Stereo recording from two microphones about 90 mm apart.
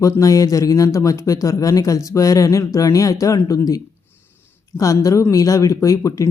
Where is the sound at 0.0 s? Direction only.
40° left (ahead or behind).